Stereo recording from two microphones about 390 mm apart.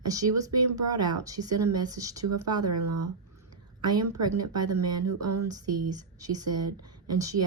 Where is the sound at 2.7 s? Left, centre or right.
Right.